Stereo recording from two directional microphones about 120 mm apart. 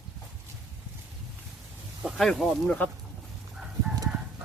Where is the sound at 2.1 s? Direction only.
Centre (ahead or behind).